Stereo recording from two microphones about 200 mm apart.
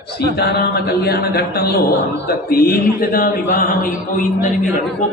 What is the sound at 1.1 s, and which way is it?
A man's voice, 50° left (ahead or behind).